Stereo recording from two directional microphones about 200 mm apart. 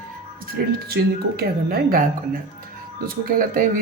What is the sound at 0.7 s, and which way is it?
Speech, 50° right (ahead or behind).